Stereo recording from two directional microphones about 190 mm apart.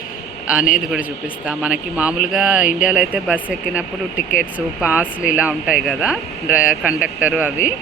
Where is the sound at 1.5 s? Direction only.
5° right (ahead or behind).